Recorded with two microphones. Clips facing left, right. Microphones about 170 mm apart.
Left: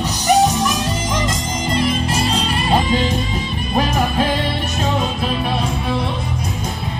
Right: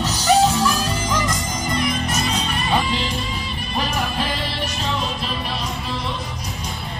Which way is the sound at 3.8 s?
50° left (ahead or behind).